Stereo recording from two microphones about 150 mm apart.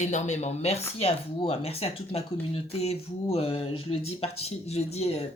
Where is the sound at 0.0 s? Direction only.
50° left (ahead or behind).